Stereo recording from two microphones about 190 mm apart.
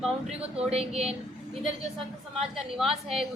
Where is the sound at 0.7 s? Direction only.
35° right (ahead or behind).